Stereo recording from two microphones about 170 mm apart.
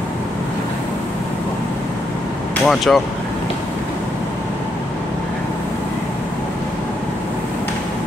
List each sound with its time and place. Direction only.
2.6 s speech: centre (ahead or behind)